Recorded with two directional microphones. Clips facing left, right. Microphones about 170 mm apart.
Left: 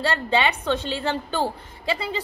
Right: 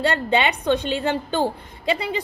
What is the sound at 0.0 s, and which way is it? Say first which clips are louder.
A woman's voice: right 2 dB; 20° right (ahead or behind).